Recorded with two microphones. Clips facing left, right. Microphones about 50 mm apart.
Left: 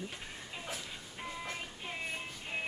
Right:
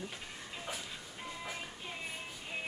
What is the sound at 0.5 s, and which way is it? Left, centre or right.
Dog, centre.